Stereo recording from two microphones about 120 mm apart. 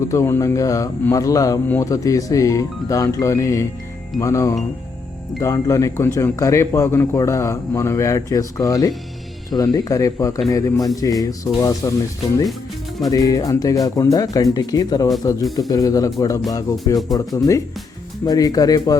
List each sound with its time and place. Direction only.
0.1 s speech: 25° left (ahead or behind)